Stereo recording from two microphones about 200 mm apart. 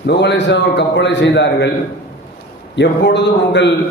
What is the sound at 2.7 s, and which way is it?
Speech, 60° left (ahead or behind).